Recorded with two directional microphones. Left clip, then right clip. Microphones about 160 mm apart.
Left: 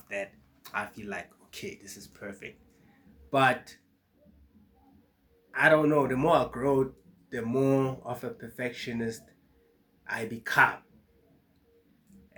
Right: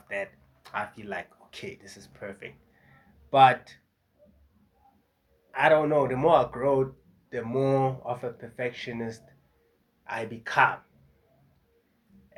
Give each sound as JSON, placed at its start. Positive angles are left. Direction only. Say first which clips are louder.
{"t": 0.1, "sound": "speech", "louder": "right 2 dB", "side_deg": 20}
{"t": 5.5, "sound": "speech", "louder": "right 1 dB", "side_deg": 30}